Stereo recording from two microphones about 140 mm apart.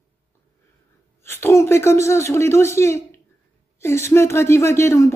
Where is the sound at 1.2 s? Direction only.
20° left (ahead or behind).